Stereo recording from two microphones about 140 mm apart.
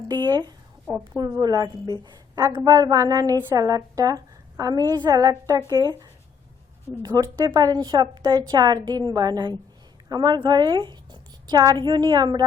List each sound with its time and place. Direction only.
0.1 s a woman's voice: 30° right (ahead or behind)
7.0 s a woman's voice: 30° right (ahead or behind)